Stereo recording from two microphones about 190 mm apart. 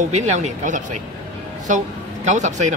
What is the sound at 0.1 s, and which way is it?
Speech, 40° right (ahead or behind).